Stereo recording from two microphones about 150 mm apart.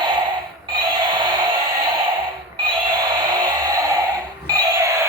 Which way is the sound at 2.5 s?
30° right (ahead or behind).